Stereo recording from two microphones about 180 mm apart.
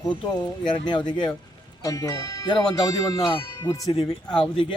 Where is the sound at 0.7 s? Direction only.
25° left (ahead or behind).